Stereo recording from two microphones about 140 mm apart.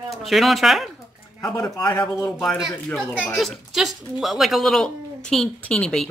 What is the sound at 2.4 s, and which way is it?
Speech, centre (ahead or behind).